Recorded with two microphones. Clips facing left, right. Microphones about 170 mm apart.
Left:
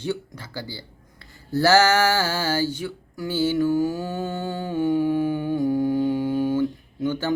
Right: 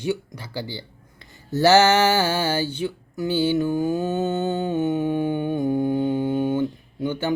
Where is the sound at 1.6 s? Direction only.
20° right (ahead or behind).